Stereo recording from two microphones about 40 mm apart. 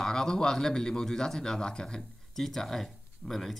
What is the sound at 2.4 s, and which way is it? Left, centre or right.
Speech, centre.